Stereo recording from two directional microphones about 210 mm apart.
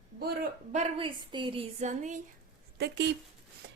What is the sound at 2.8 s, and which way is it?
Speech, 55° right (ahead or behind).